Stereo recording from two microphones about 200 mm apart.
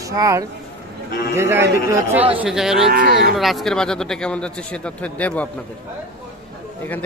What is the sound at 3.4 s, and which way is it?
Speech, centre (ahead or behind).